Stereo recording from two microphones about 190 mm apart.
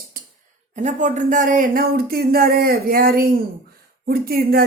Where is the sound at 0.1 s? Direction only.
50° right (ahead or behind).